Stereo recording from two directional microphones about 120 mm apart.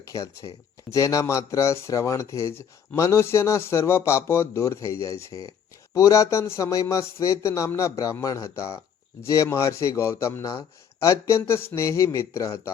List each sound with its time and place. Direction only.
0.0 s speech: 25° left (ahead or behind)